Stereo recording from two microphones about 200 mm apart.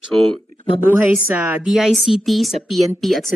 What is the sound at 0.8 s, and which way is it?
A woman's voice, 10° right (ahead or behind).